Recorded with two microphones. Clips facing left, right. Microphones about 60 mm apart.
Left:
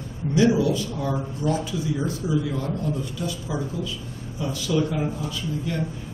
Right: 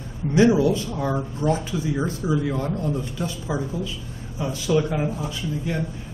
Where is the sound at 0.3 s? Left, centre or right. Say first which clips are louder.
Right 2 dB; right.